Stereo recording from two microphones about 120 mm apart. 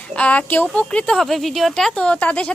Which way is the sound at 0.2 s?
10° left (ahead or behind).